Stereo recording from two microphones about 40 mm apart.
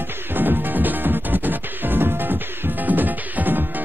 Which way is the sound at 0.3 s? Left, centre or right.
Right.